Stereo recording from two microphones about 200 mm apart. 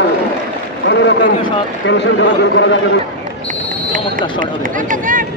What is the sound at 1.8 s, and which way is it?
Speech, 65° left (ahead or behind).